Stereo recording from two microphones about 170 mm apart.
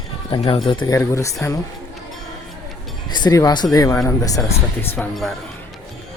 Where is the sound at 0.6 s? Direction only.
20° left (ahead or behind).